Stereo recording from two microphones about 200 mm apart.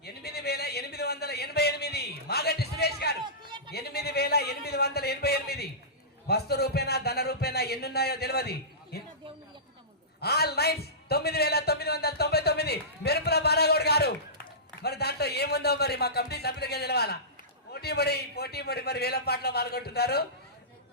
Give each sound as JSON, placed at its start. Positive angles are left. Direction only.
{"t": 0.0, "sound": "a sound", "side_deg": 50}
{"t": 6.2, "sound": "speech", "side_deg": 55}
{"t": 10.2, "sound": "a man's voice", "side_deg": 50}